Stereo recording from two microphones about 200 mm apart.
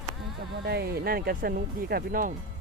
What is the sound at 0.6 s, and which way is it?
Speech, 50° right (ahead or behind).